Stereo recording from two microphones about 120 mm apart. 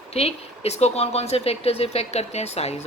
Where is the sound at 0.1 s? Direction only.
60° left (ahead or behind).